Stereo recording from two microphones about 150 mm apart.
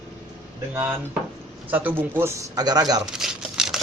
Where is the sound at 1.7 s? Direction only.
10° right (ahead or behind).